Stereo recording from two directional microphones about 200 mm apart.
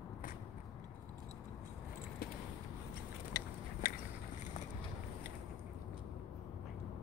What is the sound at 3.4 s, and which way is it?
Biting, 55° left (ahead or behind).